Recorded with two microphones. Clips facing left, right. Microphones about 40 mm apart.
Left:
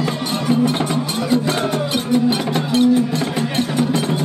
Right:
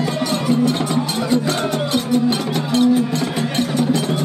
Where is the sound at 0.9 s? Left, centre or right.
Centre.